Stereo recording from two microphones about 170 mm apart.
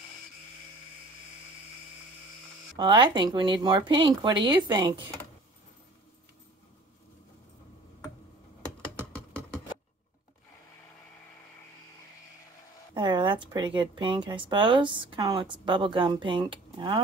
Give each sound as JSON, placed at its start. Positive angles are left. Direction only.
{"t": 2.8, "sound": "speech", "side_deg": -25}
{"t": 12.9, "sound": "speech", "side_deg": -30}